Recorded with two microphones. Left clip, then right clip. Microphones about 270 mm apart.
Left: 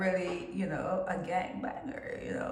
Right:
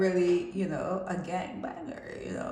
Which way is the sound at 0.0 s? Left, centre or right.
Right.